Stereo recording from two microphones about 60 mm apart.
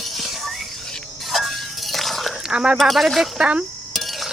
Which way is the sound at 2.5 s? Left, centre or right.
Centre.